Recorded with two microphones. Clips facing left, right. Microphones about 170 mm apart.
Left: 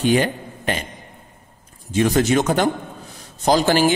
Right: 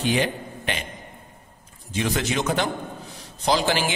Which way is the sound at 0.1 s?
45° left (ahead or behind).